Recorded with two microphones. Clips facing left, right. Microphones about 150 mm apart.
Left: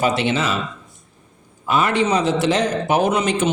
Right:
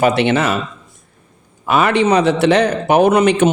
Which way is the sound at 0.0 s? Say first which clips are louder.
Right 5 dB; 60° right (ahead or behind).